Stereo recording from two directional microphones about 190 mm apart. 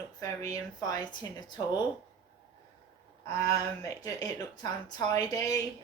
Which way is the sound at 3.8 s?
20° left (ahead or behind).